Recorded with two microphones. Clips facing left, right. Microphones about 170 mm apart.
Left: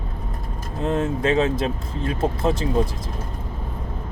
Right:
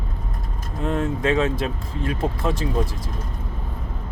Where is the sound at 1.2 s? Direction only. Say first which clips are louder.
Left 1 dB; 35° left (ahead or behind).